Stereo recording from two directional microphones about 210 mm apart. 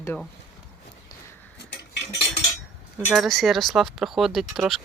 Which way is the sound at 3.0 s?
Centre (ahead or behind).